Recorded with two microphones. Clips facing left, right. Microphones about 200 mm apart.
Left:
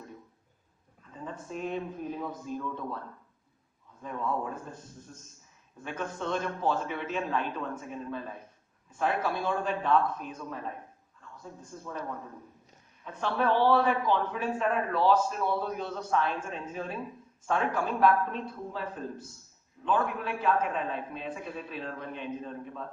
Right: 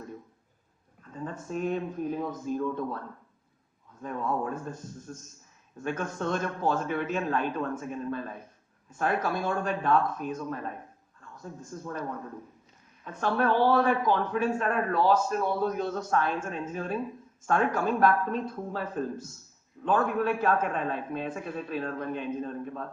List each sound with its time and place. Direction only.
1.1 s a man's voice: 45° right (ahead or behind)
4.0 s a man's voice: 45° right (ahead or behind)
8.9 s a man's voice: 45° right (ahead or behind)
11.6 s a man's voice: 45° right (ahead or behind)
13.1 s a man's voice: 45° right (ahead or behind)